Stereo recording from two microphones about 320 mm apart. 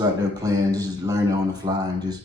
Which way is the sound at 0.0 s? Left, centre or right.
Centre.